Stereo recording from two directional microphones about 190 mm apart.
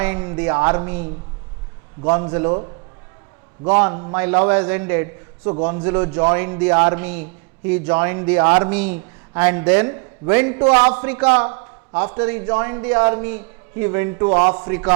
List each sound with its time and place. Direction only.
0.0 s a man's voice: 15° right (ahead or behind)
2.3 s a man's voice: 20° right (ahead or behind)
3.7 s a man's voice: 15° right (ahead or behind)